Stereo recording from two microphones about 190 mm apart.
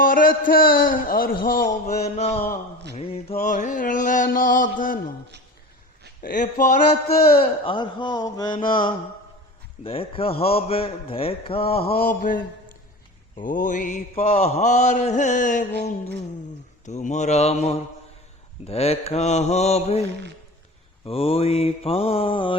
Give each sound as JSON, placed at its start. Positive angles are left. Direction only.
{"t": 0.0, "sound": "mantra", "side_deg": 45}
{"t": 3.3, "sound": "mantra", "side_deg": 40}
{"t": 6.2, "sound": "a man's voice", "side_deg": 40}
{"t": 9.8, "sound": "a man's voice", "side_deg": 30}
{"t": 11.9, "sound": "a man's voice", "side_deg": 50}
{"t": 13.4, "sound": "mantra", "side_deg": 45}
{"t": 16.8, "sound": "mantra", "side_deg": 40}